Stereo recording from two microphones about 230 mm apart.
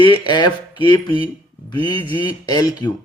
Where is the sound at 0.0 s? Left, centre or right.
Centre.